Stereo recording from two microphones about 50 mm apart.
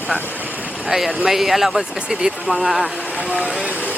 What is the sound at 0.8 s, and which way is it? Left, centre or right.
Speech, centre.